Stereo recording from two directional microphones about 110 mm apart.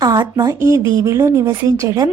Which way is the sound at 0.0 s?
40° right (ahead or behind).